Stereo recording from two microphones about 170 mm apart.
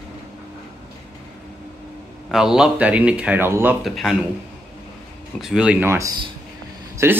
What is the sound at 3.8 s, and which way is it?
Speech, centre (ahead or behind).